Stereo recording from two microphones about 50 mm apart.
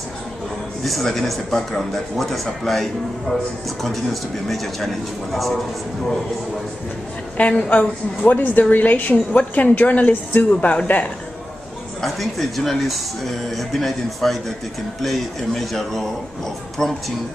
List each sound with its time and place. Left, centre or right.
0.8 s a man's voice: centre
7.3 s a woman's voice: left
12.0 s a man's voice: centre